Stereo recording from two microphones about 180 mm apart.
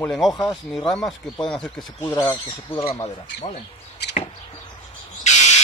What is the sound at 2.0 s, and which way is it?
Speech, 20° left (ahead or behind).